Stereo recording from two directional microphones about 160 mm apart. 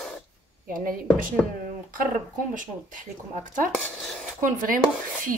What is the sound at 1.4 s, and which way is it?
Speech, centre (ahead or behind).